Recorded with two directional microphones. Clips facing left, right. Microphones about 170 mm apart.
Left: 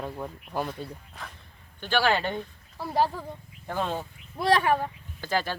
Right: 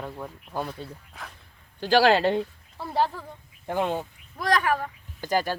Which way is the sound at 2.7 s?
5° left (ahead or behind).